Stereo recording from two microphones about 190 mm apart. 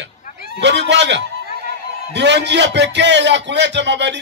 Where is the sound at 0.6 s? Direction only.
65° right (ahead or behind).